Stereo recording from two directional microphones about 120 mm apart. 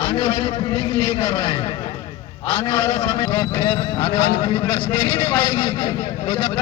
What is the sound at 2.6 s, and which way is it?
A man's voice, 25° left (ahead or behind).